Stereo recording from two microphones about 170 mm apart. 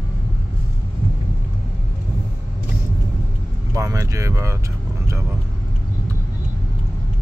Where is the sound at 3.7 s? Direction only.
20° right (ahead or behind).